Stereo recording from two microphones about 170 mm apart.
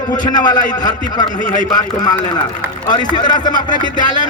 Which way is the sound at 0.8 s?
25° left (ahead or behind).